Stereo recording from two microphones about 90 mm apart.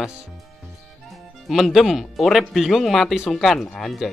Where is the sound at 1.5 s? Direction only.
Centre (ahead or behind).